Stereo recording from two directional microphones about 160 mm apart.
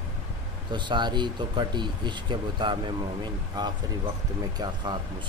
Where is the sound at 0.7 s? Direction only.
30° right (ahead or behind).